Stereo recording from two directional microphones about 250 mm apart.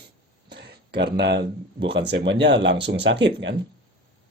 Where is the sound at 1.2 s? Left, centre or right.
Right.